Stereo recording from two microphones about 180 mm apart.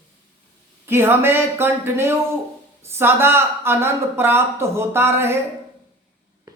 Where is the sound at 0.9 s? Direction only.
15° right (ahead or behind).